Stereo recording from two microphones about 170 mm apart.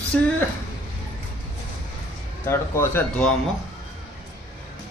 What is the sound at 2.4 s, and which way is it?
Speech, 15° left (ahead or behind).